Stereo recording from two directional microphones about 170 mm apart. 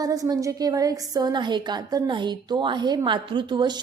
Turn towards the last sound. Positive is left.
turn(degrees=-25)  # may be behind; listen again after turning